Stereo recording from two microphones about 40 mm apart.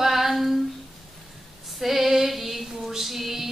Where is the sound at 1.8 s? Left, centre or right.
Centre.